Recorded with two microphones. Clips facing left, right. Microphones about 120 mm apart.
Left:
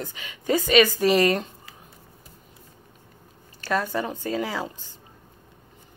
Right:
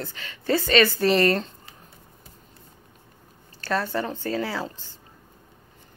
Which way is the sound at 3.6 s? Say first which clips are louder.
Even; 10° left (ahead or behind).